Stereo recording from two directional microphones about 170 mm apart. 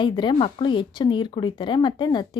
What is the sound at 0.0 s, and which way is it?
Speech, 30° left (ahead or behind).